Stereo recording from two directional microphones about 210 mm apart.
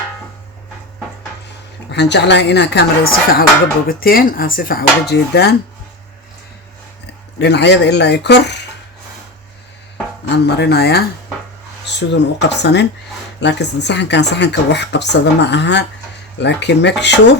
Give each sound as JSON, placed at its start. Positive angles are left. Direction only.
{"t": 1.9, "sound": "speech", "side_deg": 55}
{"t": 7.3, "sound": "speech", "side_deg": 55}
{"t": 10.2, "sound": "speech", "side_deg": 50}